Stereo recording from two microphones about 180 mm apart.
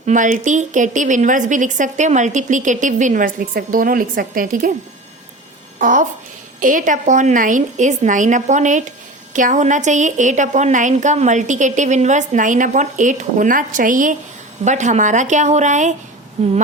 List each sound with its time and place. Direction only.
0.0 s a woman's voice: 45° right (ahead or behind)
5.8 s a woman's voice: 45° right (ahead or behind)